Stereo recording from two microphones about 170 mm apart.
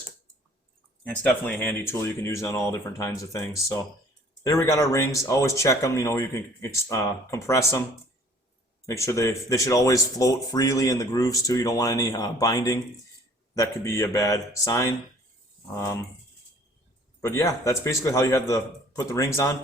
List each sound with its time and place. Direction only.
1.0 s speech: 10° left (ahead or behind)
8.9 s speech: 15° left (ahead or behind)
17.2 s speech: 15° left (ahead or behind)